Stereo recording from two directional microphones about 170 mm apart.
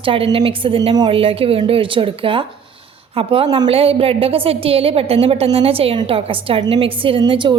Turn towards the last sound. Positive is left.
turn(degrees=-30)  # may be behind; listen again after turning